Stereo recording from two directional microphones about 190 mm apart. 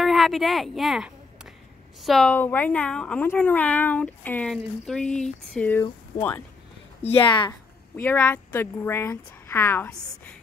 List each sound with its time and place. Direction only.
0.0 s a sound: centre (ahead or behind)
2.0 s speech: centre (ahead or behind)
7.2 s speech: 25° left (ahead or behind)
7.9 s speech: 10° left (ahead or behind)